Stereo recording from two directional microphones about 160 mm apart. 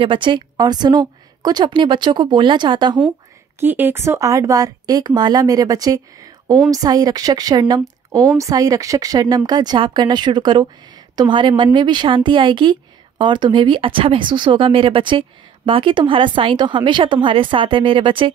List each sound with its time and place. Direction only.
0.0 s speech: 30° right (ahead or behind)
3.5 s a woman's voice: 10° right (ahead or behind); by 18.3 s 35° right (ahead or behind)